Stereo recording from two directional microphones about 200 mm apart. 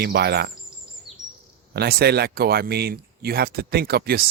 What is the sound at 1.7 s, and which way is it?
Speech, 55° right (ahead or behind).